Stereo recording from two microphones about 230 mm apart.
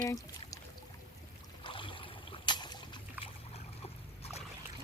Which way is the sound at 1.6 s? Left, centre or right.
Left.